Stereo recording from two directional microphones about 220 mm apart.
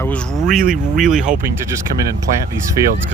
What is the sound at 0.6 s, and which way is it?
Speech, 40° right (ahead or behind).